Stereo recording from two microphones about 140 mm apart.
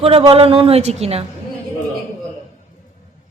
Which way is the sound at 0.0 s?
45° right (ahead or behind).